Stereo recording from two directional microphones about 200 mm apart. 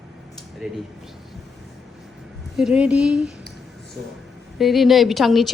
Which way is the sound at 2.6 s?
5° right (ahead or behind).